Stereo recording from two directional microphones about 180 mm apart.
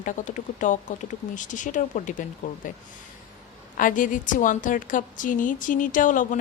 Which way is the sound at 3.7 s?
50° left (ahead or behind).